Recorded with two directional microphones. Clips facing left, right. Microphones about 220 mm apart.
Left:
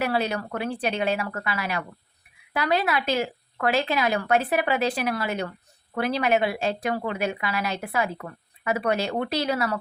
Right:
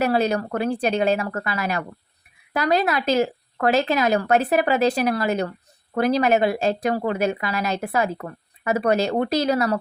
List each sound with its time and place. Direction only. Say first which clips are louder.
0.0 s a woman's voice: right 5 dB; 40° right (ahead or behind)